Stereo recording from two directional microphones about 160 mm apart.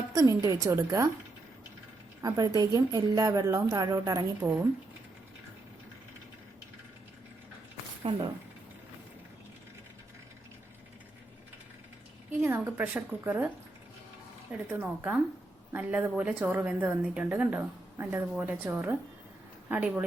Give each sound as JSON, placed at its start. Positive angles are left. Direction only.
{"t": 0.1, "sound": "a woman's voice", "side_deg": -20}
{"t": 2.2, "sound": "a woman's voice", "side_deg": -20}
{"t": 8.1, "sound": "speech", "side_deg": -35}
{"t": 12.4, "sound": "a woman's voice", "side_deg": -15}
{"t": 14.7, "sound": "a woman's voice", "side_deg": -10}